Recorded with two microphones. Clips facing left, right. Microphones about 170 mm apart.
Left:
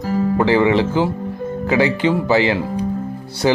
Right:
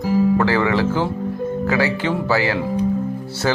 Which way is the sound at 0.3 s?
20° left (ahead or behind).